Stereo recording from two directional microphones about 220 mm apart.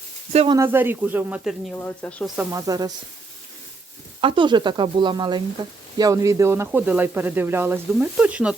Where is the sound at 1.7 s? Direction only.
5° left (ahead or behind).